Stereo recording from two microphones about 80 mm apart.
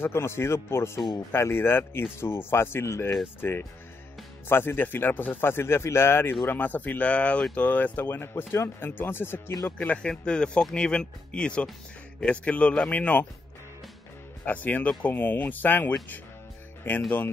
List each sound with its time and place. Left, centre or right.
0.0 s speech: left
9.8 s speech: centre
14.4 s speech: left